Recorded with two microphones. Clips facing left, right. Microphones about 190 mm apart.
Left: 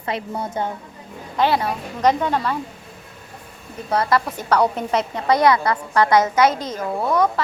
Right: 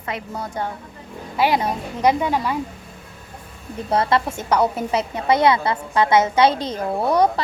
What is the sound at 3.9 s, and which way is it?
Speech, 25° right (ahead or behind).